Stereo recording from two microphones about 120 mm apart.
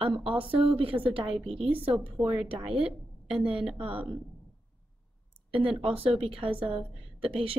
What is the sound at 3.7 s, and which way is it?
Speech, 45° right (ahead or behind).